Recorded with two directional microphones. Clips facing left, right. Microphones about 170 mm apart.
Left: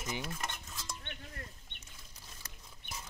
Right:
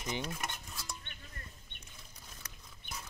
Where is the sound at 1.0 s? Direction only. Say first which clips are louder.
Left 6 dB; 70° left (ahead or behind).